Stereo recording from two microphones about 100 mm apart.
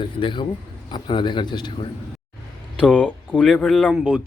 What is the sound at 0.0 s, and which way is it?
Speech, 55° left (ahead or behind).